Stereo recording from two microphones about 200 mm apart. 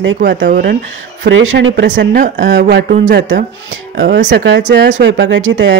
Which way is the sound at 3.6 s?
65° right (ahead or behind).